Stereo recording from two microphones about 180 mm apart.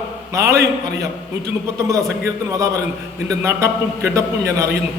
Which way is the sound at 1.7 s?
15° right (ahead or behind).